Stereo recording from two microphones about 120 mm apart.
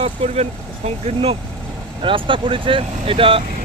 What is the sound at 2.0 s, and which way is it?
Speech, 45° right (ahead or behind).